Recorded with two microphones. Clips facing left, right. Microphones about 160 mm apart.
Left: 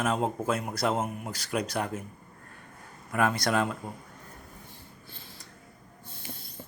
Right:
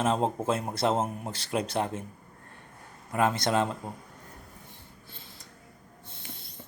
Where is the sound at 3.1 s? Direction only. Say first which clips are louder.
Right 1 dB; 25° right (ahead or behind).